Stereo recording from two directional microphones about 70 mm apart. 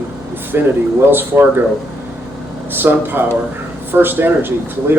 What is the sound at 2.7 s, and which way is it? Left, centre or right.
Speech, right.